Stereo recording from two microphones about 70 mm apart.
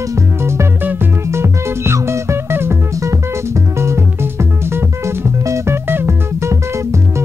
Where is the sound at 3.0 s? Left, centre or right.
Right.